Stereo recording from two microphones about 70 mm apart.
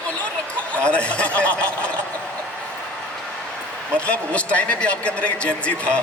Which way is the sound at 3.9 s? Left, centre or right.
Centre.